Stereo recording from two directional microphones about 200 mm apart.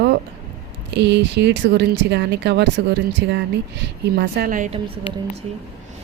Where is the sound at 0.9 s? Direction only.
60° right (ahead or behind).